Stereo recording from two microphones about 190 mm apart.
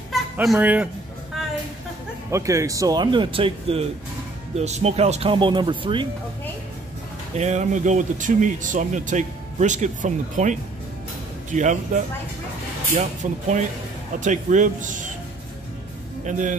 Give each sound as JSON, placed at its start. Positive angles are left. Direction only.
{"t": 0.1, "sound": "a sound", "side_deg": 0}
{"t": 2.3, "sound": "speech", "side_deg": -15}
{"t": 7.3, "sound": "speech", "side_deg": -35}
{"t": 16.3, "sound": "speech", "side_deg": -40}